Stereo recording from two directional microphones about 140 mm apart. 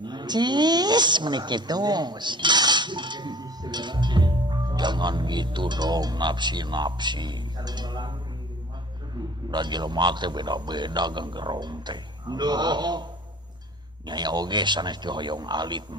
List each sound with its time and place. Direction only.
0.0 s speech: 30° right (ahead or behind)
9.5 s a man's voice: 30° right (ahead or behind)